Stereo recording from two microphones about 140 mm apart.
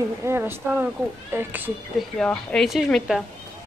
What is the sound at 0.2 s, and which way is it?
Speech, 15° right (ahead or behind).